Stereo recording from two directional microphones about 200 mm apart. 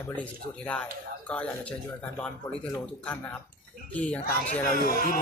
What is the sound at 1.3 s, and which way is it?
Speech, 5° left (ahead or behind).